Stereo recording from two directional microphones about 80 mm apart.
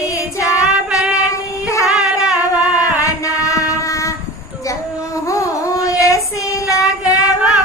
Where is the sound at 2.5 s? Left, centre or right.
Left.